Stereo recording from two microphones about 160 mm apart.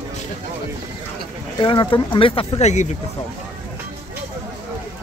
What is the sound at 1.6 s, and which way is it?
Speech, 30° left (ahead or behind).